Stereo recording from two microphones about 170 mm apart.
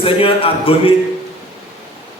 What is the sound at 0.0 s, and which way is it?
Speech, 35° left (ahead or behind).